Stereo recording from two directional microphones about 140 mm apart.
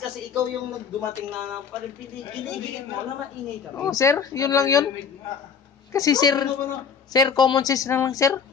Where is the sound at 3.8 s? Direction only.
20° left (ahead or behind).